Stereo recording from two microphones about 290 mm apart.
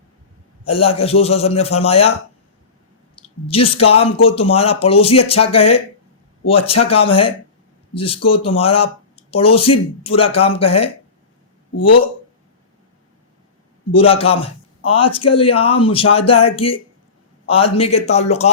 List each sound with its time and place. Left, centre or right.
0.6 s speech: centre
3.4 s speech: centre
13.9 s speech: centre